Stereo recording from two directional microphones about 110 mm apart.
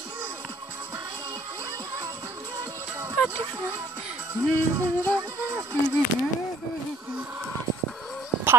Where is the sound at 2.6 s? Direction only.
25° right (ahead or behind).